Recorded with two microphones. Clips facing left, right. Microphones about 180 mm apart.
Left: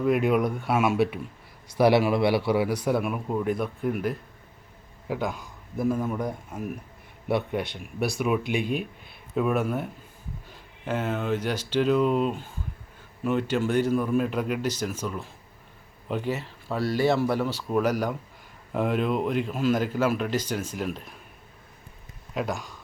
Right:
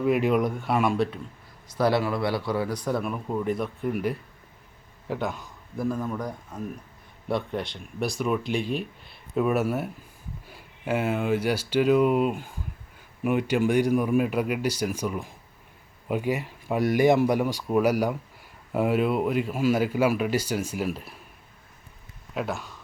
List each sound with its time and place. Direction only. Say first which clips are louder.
0.0 s a man's voice: even; centre (ahead or behind)
22.4 s speech: left 1 dB; centre (ahead or behind)